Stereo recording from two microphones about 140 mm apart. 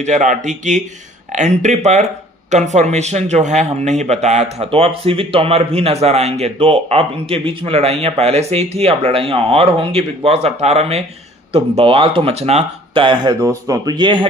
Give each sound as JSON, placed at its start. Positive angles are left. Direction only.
{"t": 0.0, "sound": "speech", "side_deg": -60}